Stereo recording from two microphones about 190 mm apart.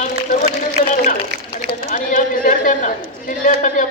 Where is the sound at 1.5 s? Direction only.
40° left (ahead or behind).